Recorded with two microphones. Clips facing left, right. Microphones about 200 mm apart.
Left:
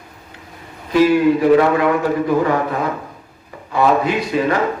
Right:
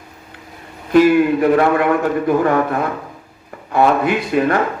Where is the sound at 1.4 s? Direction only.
55° right (ahead or behind).